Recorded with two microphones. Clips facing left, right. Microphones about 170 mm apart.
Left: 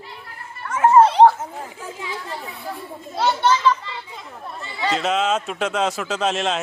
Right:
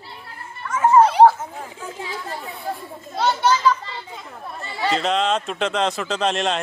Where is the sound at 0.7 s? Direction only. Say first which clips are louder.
Left 2 dB; 60° left (ahead or behind).